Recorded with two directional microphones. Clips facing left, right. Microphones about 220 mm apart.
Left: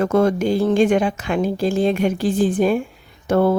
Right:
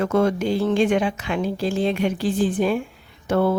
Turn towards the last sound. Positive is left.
turn(degrees=45)  # may be behind; listen again after turning